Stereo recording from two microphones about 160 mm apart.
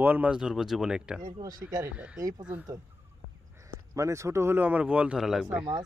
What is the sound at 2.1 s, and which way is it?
Speech, 20° right (ahead or behind).